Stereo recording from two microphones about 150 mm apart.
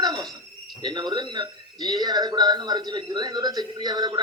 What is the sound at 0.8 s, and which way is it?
Speech, 30° right (ahead or behind).